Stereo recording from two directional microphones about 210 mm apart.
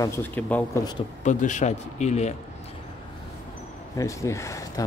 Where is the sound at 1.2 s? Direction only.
35° left (ahead or behind).